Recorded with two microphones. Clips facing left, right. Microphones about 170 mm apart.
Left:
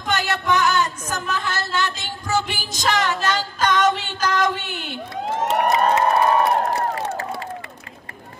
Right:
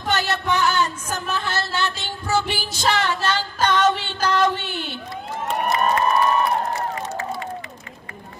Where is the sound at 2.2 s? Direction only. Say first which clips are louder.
Right 1 dB; 45° left (ahead or behind).